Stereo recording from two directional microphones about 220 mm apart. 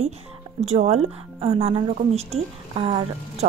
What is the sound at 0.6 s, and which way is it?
A woman's voice, 30° right (ahead or behind).